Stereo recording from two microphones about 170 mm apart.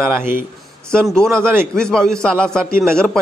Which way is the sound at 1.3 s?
15° right (ahead or behind).